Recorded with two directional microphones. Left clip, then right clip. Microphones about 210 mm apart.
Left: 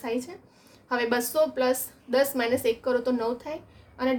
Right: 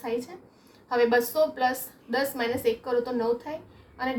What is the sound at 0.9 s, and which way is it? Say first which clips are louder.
A woman's voice: right 4 dB; 45° left (ahead or behind).